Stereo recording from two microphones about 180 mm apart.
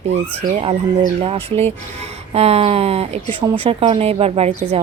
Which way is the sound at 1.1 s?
30° right (ahead or behind).